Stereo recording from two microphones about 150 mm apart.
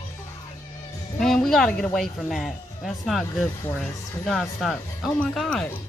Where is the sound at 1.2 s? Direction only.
5° left (ahead or behind).